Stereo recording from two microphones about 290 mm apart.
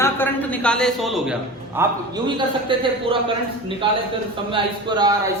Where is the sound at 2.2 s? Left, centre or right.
Centre.